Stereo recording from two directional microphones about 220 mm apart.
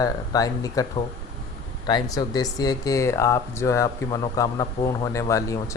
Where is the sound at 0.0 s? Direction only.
15° left (ahead or behind).